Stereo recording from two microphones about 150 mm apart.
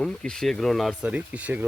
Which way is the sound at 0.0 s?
5° left (ahead or behind).